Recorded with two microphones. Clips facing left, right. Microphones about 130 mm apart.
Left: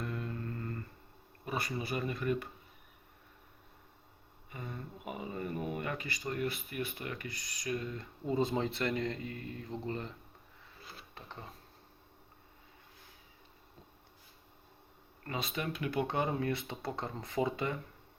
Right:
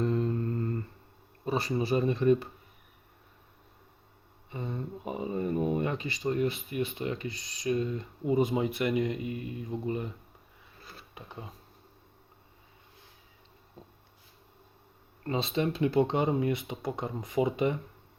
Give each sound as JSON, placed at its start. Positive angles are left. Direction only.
{"t": 0.0, "sound": "a sound", "side_deg": -30}
{"t": 1.5, "sound": "speech", "side_deg": -30}
{"t": 4.5, "sound": "speech", "side_deg": -25}
{"t": 15.2, "sound": "speech", "side_deg": -30}